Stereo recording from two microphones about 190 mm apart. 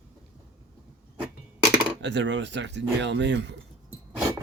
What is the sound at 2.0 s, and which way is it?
Speech, 70° right (ahead or behind).